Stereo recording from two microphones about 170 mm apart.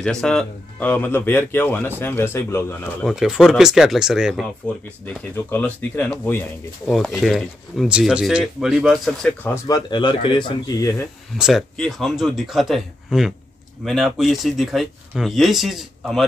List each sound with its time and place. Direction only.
0.0 s speech: 5° left (ahead or behind)
3.0 s speech: 5° right (ahead or behind)
5.0 s speech: 10° left (ahead or behind)
6.9 s speech: centre (ahead or behind)
9.4 s speech: 20° left (ahead or behind)
11.3 s speech: 5° right (ahead or behind)